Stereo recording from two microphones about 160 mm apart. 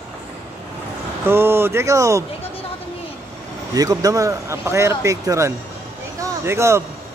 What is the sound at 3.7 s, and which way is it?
Speech, 20° right (ahead or behind).